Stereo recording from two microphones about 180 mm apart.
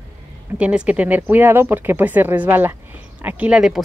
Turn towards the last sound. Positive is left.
turn(degrees=-5)  # may be behind; listen again after turning